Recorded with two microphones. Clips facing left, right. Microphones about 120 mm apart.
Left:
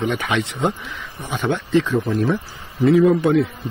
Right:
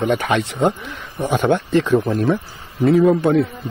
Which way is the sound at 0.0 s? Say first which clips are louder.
Right 3 dB; 45° right (ahead or behind).